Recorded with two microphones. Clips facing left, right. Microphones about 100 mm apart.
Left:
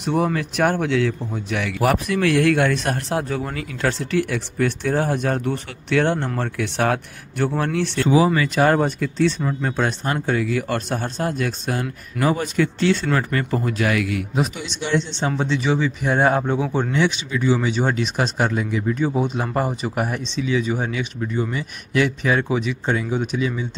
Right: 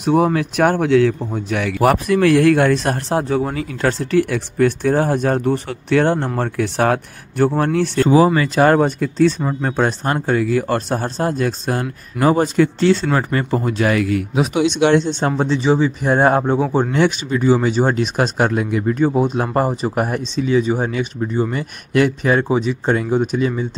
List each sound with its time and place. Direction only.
0.0 s speech: 50° right (ahead or behind); by 3.6 s 25° right (ahead or behind)
3.8 s speech: 45° right (ahead or behind)
14.3 s speech: 70° right (ahead or behind)
15.0 s speech: 45° right (ahead or behind)
15.5 s speech: 35° right (ahead or behind)
21.5 s speech: 45° right (ahead or behind)
22.9 s speech: 45° right (ahead or behind)